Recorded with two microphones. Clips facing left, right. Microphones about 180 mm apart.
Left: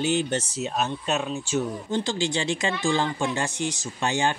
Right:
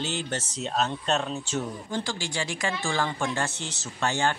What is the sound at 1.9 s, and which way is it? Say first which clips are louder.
Speech: left 6 dB; 20° left (ahead or behind).